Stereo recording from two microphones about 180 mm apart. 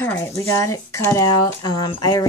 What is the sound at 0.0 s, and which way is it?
Speech, 10° left (ahead or behind).